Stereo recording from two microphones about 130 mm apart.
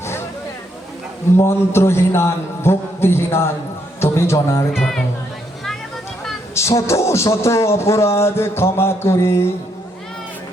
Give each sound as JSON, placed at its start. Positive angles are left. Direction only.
{"t": 1.4, "sound": "speech", "side_deg": 20}
{"t": 4.7, "sound": "speech", "side_deg": 5}
{"t": 6.5, "sound": "speech", "side_deg": 20}